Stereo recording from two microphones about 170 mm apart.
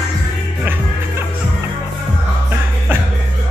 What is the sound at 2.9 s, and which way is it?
Music, 10° right (ahead or behind).